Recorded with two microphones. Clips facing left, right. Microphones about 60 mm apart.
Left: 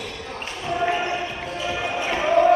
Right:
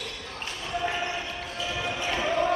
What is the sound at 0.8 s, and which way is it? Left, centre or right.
Basketball bounce, left.